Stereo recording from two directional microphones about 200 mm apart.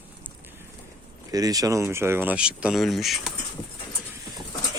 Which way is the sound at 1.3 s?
20° right (ahead or behind).